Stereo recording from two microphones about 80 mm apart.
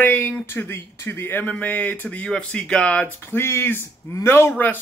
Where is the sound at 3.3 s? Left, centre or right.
Left.